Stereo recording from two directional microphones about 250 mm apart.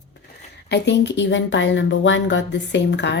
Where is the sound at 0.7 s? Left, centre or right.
Left.